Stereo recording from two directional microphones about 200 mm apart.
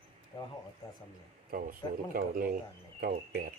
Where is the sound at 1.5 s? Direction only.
45° right (ahead or behind).